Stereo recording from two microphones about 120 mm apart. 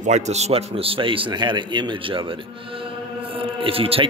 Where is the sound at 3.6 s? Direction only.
50° right (ahead or behind).